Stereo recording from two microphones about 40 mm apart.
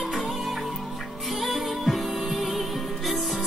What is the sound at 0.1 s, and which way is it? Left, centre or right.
Music, centre.